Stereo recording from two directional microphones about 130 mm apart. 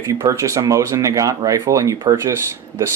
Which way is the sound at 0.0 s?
25° right (ahead or behind).